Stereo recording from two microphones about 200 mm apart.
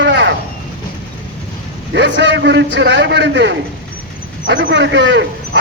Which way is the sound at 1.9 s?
60° right (ahead or behind).